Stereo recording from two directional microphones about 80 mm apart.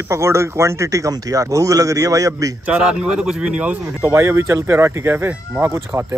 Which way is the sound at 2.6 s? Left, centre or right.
Centre.